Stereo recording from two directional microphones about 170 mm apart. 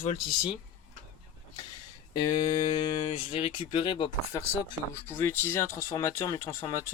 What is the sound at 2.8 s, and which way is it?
Speech, 30° left (ahead or behind).